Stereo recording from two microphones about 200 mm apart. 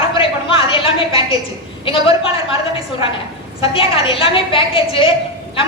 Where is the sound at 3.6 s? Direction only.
25° left (ahead or behind).